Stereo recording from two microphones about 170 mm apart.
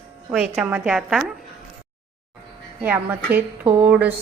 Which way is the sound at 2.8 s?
10° right (ahead or behind).